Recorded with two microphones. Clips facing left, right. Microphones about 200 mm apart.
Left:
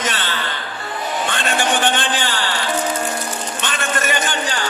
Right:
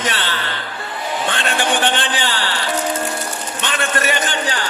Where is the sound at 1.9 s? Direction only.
45° left (ahead or behind).